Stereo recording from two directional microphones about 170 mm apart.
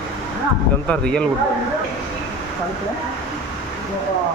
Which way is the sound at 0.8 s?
5° left (ahead or behind).